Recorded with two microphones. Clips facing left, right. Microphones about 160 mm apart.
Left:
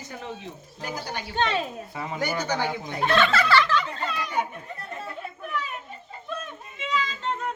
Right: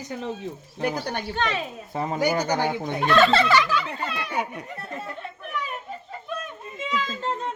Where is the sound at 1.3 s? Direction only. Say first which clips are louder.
Left 3 dB; 30° left (ahead or behind).